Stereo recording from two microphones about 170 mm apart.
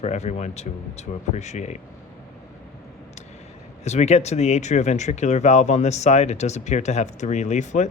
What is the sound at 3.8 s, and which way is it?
Speech, 40° left (ahead or behind).